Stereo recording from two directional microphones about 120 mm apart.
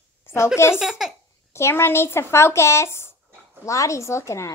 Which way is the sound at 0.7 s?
5° right (ahead or behind).